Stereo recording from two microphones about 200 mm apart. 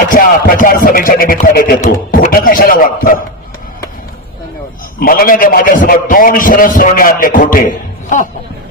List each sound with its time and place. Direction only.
0.1 s a man's voice: 45° left (ahead or behind)
4.9 s a man's voice: 45° left (ahead or behind)